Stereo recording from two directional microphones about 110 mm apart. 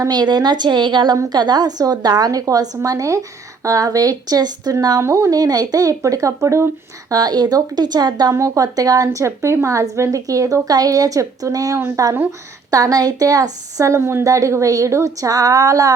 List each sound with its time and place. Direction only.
0.0 s a woman's voice: 40° right (ahead or behind)